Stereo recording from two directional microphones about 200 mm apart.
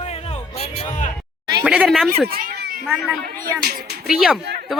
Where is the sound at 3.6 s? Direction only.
55° right (ahead or behind).